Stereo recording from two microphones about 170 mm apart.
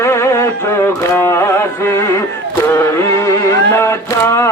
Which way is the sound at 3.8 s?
15° left (ahead or behind).